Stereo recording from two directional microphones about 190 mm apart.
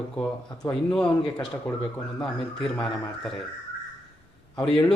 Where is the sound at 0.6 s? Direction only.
5° left (ahead or behind).